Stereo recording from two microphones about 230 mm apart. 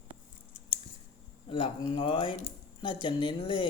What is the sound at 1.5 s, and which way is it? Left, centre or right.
Speech, left.